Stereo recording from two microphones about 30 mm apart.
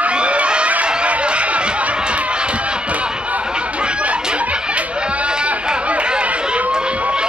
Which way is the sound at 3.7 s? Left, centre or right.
Right.